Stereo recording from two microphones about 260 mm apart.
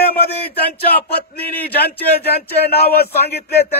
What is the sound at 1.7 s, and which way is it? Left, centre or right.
Speech, left.